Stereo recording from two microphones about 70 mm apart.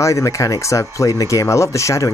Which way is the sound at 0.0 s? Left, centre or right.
Left.